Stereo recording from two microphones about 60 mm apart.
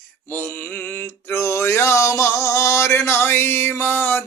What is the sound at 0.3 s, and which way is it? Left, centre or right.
Mantra, left.